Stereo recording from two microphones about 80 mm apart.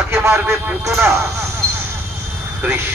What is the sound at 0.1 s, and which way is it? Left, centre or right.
Vehicle, right.